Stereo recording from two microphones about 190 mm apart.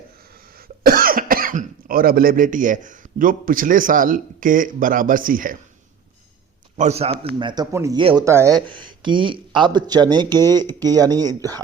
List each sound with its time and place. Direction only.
0.9 s speech: 50° right (ahead or behind)
6.7 s speech: 35° right (ahead or behind); by 11.6 s 20° right (ahead or behind)